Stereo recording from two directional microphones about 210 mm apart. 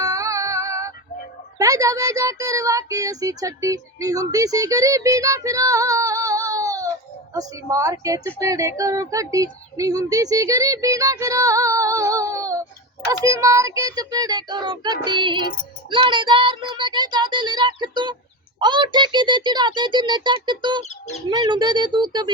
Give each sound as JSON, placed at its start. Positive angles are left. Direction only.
{"t": 0.0, "sound": "music", "side_deg": -15}
{"t": 1.5, "sound": "speech", "side_deg": -15}